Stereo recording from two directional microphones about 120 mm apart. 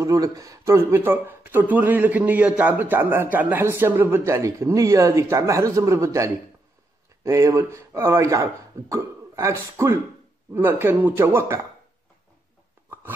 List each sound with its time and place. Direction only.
0.0 s speech: 25° right (ahead or behind)